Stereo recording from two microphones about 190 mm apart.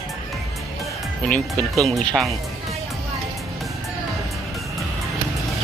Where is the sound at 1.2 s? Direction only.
5° left (ahead or behind).